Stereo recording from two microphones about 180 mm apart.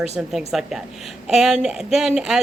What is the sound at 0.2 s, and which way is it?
Speech, centre (ahead or behind).